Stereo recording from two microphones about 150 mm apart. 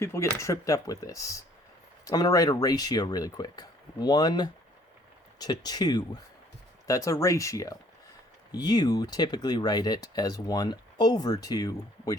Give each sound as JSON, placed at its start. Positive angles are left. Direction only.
{"t": 0.0, "sound": "speech", "side_deg": 20}